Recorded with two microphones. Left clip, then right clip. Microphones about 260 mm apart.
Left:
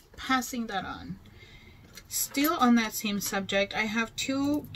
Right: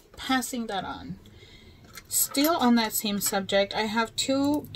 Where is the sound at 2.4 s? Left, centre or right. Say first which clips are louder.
Right 2 dB; centre.